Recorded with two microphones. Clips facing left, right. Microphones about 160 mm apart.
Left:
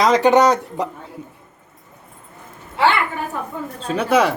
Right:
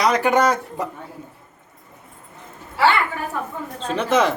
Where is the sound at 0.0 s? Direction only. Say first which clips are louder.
Left 4 dB; 25° left (ahead or behind).